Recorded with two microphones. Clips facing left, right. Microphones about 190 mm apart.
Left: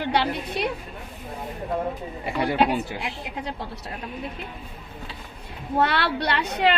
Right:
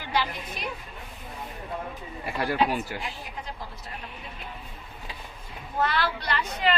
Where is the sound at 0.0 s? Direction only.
65° left (ahead or behind).